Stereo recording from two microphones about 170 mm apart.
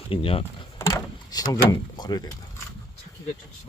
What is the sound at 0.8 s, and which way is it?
Speech, 20° left (ahead or behind).